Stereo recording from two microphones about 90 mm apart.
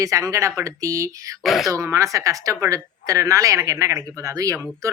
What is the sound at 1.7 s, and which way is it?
A woman's voice, 35° right (ahead or behind).